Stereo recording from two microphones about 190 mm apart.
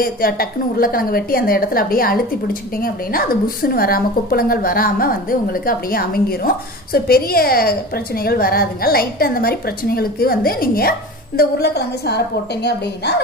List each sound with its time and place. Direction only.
0.0 s a woman's voice: 50° left (ahead or behind)